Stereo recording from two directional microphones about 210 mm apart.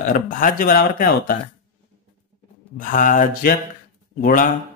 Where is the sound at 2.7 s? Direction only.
40° left (ahead or behind).